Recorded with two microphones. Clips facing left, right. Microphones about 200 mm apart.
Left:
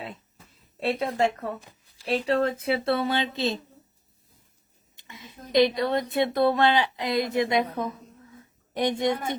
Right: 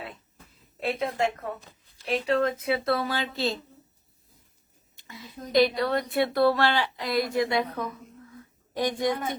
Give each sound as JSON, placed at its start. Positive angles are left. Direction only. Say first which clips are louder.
{"t": 0.8, "sound": "a woman's voice", "louder": "left 2 dB", "side_deg": 35}
{"t": 4.9, "sound": "a woman's voice", "louder": "right 4 dB", "side_deg": 20}